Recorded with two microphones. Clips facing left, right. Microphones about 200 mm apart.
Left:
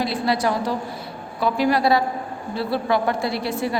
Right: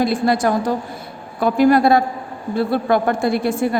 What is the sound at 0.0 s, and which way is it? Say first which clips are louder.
A woman's voice: right 5 dB; 50° right (ahead or behind).